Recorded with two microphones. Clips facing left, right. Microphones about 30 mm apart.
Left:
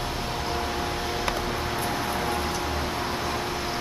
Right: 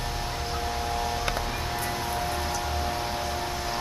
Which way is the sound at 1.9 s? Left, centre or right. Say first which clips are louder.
Left 2 dB; left.